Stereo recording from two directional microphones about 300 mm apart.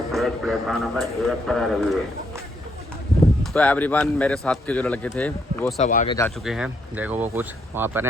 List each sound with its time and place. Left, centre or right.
0.1 s speech: centre
3.4 s speech: centre
5.8 s speech: left
6.1 s speech: centre